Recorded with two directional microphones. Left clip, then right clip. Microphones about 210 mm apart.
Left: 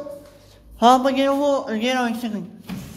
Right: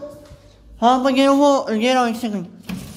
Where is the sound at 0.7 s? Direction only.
5° left (ahead or behind).